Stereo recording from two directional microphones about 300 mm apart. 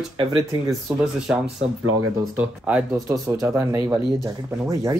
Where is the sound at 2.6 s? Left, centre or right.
Centre.